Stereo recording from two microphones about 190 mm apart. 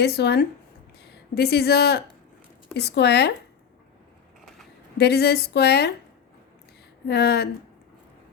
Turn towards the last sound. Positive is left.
turn(degrees=55)  # may be behind; listen again after turning